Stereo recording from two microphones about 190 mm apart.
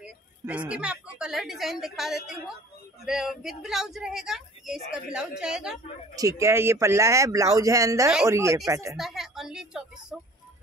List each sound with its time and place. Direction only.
0.0 s a woman's voice: 5° right (ahead or behind)
6.1 s speech: 15° right (ahead or behind)
8.9 s speech: centre (ahead or behind)